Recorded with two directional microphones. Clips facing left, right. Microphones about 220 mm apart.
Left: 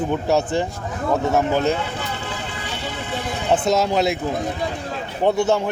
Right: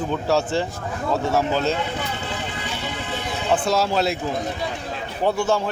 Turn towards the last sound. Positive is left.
turn(degrees=20)  # may be behind; listen again after turning